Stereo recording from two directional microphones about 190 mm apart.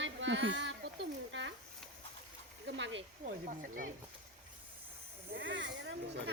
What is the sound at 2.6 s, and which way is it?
Speech, 75° right (ahead or behind).